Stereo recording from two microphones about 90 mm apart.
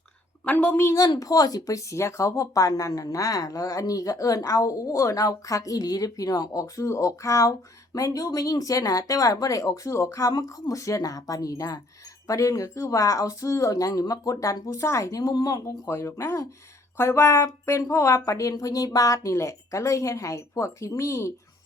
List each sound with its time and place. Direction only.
0.4 s a woman's voice: 15° left (ahead or behind)
1.2 s speech: 45° left (ahead or behind)